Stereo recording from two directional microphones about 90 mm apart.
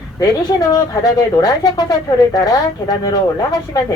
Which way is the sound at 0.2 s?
40° left (ahead or behind).